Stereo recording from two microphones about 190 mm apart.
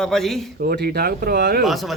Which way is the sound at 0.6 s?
55° right (ahead or behind).